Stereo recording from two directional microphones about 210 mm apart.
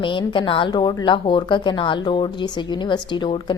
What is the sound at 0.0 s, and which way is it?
Mantra, 25° left (ahead or behind).